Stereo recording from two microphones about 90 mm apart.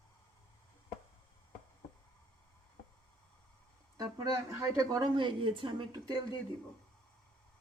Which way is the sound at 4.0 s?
45° right (ahead or behind).